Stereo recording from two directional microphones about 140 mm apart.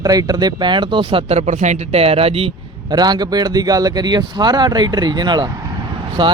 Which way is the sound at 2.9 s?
30° right (ahead or behind).